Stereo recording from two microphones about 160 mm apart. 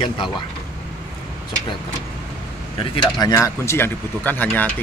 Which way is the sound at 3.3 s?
15° left (ahead or behind).